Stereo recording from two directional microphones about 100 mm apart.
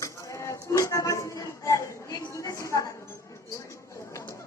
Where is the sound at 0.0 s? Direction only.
30° left (ahead or behind).